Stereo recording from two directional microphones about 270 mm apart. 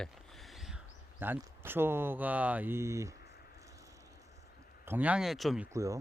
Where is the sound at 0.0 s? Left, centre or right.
Centre.